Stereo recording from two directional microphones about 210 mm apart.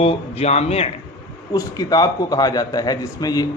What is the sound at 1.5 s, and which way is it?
A man's voice, 20° left (ahead or behind).